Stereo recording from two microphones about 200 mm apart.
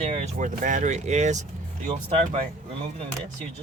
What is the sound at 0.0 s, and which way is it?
Speech, 30° right (ahead or behind).